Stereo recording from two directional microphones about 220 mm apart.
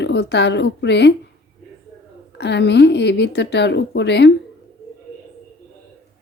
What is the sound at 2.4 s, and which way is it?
A woman's voice, 50° left (ahead or behind).